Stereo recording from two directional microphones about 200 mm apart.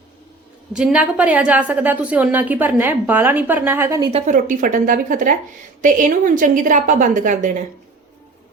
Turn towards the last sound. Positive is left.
turn(degrees=-40)  # may be behind; listen again after turning